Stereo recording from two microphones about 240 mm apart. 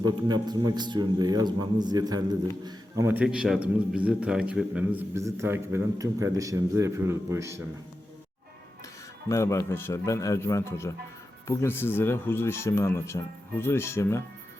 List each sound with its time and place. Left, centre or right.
0.0 s a man's voice: centre
9.3 s speech: centre